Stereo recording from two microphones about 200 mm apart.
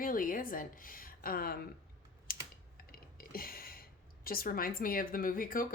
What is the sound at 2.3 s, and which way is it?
Typing, 45° left (ahead or behind).